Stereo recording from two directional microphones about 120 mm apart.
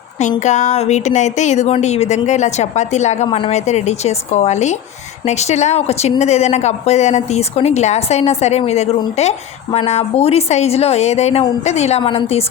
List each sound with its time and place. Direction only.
0.2 s a woman's voice: 85° left
3.2 s a woman's voice: 50° left (ahead or behind)
3.5 s a woman's voice: 70° left (ahead or behind)